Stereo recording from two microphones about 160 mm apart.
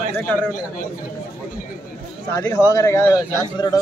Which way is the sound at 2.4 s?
20° left (ahead or behind).